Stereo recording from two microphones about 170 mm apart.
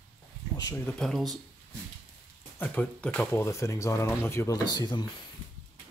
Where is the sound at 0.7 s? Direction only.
5° left (ahead or behind).